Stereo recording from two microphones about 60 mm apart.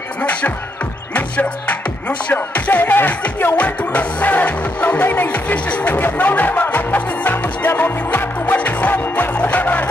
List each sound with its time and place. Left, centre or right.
0.2 s music: left